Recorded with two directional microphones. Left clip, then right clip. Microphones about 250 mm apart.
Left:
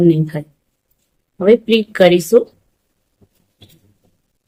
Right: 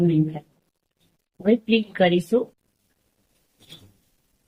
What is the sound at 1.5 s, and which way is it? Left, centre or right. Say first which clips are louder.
Speech: left 6 dB; left.